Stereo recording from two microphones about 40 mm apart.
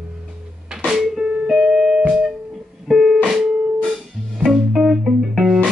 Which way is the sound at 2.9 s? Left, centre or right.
Centre.